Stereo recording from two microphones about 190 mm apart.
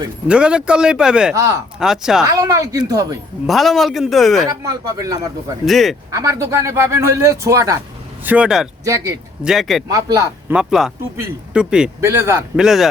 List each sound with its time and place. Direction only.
0.3 s speech: 5° right (ahead or behind)
2.2 s speech: 20° right (ahead or behind)
3.4 s speech: centre (ahead or behind)
4.4 s speech: 20° right (ahead or behind)
5.6 s speech: centre (ahead or behind)
6.1 s a man's voice: 15° right (ahead or behind)
8.8 s a man's voice: 15° right (ahead or behind)
9.4 s speech: centre (ahead or behind)
9.9 s a man's voice: 15° right (ahead or behind)
10.5 s a man's voice: 5° right (ahead or behind)
12.5 s speech: centre (ahead or behind)